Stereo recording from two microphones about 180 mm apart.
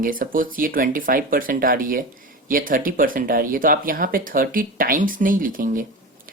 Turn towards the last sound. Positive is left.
turn(degrees=-50)  # may be behind; listen again after turning